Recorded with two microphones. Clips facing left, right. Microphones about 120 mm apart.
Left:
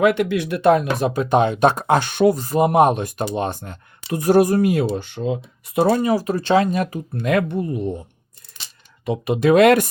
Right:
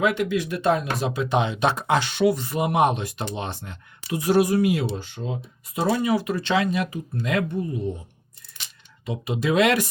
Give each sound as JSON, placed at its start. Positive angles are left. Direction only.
{"t": 0.0, "sound": "speech", "side_deg": 60}
{"t": 5.6, "sound": "speech", "side_deg": 60}
{"t": 7.1, "sound": "speech", "side_deg": 60}
{"t": 9.0, "sound": "speech", "side_deg": 60}